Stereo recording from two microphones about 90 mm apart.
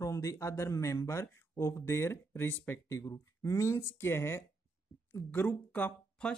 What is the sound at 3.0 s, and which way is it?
Speech, 40° left (ahead or behind).